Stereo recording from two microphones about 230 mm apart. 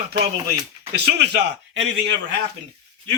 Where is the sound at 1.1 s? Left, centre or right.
Right.